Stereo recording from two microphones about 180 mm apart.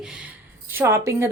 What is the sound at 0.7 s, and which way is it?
Speech, 15° right (ahead or behind).